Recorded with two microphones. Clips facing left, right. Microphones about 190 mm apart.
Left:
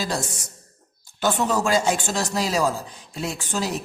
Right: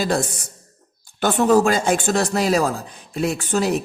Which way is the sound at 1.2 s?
55° right (ahead or behind).